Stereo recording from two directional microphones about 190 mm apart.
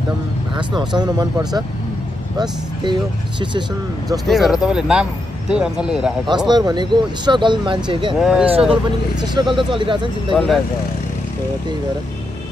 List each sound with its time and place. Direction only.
0.6 s speech: 25° right (ahead or behind)
2.3 s speech: 25° right (ahead or behind)
4.3 s speech: centre (ahead or behind)
6.2 s speech: 25° right (ahead or behind)
8.2 s speech: 5° right (ahead or behind)
8.5 s speech: 30° right (ahead or behind)
10.3 s speech: centre (ahead or behind)